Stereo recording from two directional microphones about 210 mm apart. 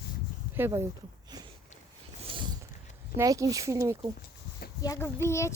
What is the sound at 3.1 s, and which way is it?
Speech, 15° right (ahead or behind).